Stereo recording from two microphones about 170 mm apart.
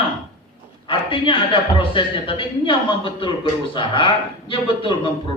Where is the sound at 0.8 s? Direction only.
30° left (ahead or behind).